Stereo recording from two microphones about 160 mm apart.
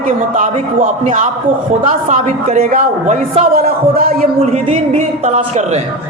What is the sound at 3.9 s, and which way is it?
Speech, 65° right (ahead or behind).